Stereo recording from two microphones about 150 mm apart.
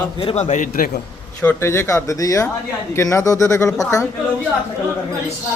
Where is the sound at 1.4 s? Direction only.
15° left (ahead or behind).